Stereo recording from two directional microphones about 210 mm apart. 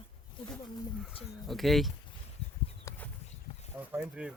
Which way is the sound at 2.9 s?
10° left (ahead or behind).